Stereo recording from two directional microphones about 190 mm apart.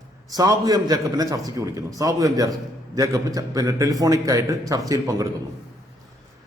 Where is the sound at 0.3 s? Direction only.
20° right (ahead or behind).